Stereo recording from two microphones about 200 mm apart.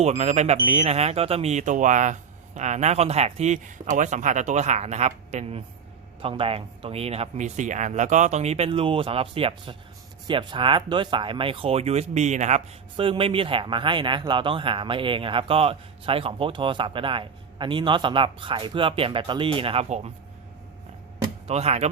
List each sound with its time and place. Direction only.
0.0 s speech: 35° right (ahead or behind)
21.4 s speech: 30° right (ahead or behind)